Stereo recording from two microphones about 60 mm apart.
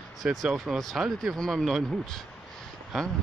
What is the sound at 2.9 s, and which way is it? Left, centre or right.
Speech, centre.